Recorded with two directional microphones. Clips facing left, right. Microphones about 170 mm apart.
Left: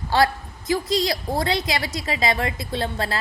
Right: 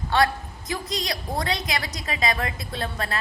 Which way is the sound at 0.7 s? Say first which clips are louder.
Left 7 dB; 30° left (ahead or behind).